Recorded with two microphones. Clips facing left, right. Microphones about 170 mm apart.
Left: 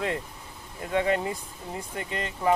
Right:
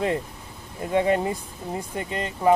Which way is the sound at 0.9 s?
30° right (ahead or behind).